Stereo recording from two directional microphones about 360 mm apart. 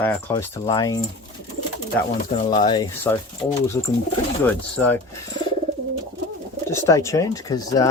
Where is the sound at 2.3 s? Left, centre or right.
Centre.